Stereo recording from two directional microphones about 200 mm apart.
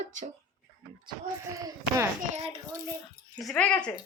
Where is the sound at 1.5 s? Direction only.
15° right (ahead or behind).